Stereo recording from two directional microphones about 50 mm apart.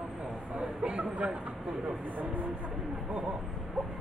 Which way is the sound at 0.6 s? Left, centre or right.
Centre.